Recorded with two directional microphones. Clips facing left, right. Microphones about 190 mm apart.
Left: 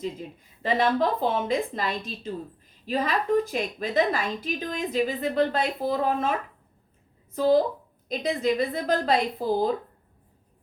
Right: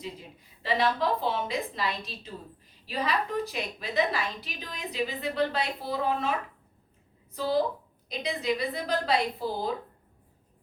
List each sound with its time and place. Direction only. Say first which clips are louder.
0.6 s a woman's voice: left 4 dB; 50° left (ahead or behind)
7.3 s a woman's voice: left 6 dB; 50° left (ahead or behind)